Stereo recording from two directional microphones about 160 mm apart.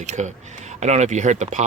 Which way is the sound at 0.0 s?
45° right (ahead or behind).